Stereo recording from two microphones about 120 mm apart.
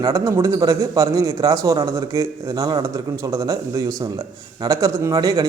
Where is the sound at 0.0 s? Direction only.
25° right (ahead or behind).